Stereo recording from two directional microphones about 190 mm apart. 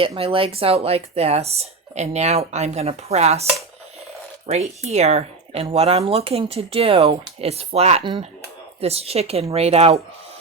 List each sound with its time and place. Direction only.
0.2 s speech: 30° right (ahead or behind)
4.4 s speech: 35° right (ahead or behind)